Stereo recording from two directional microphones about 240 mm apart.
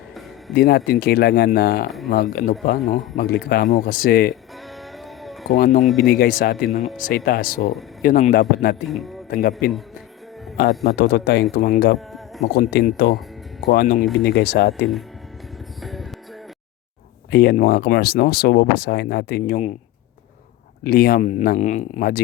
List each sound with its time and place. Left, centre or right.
0.5 s speech: left
5.2 s music: centre
5.5 s speech: left
5.8 s speech: centre
6.1 s speech: left
8.9 s speech: centre
9.3 s speech: left
10.8 s speech: left
11.9 s a sound: centre
12.5 s speech: left
15.8 s music: centre
17.3 s speech: left
20.8 s speech: left